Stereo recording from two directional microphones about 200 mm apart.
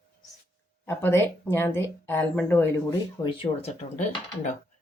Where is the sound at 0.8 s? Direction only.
15° left (ahead or behind).